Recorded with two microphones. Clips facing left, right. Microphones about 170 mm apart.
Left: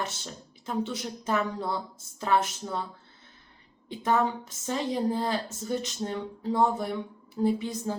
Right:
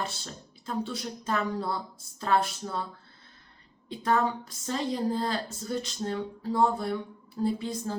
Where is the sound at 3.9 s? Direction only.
15° left (ahead or behind).